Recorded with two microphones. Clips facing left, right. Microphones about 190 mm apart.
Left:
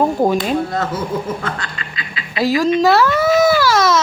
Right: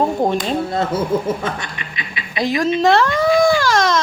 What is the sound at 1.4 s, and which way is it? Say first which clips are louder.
Speech: right 1 dB; 20° right (ahead or behind).